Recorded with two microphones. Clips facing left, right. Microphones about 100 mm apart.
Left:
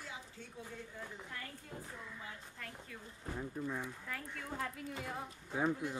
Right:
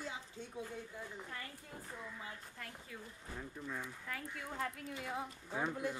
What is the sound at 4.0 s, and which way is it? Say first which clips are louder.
Speech: even; centre (ahead or behind).